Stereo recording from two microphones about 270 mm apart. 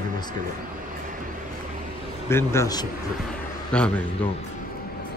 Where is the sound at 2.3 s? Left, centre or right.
Centre.